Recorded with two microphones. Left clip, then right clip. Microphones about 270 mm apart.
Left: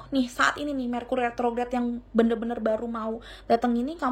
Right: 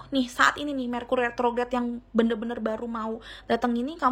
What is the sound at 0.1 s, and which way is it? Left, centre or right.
A woman's voice, centre.